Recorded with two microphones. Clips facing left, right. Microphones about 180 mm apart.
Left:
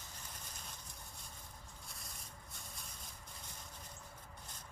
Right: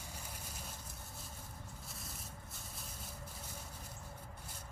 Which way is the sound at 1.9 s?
Centre (ahead or behind).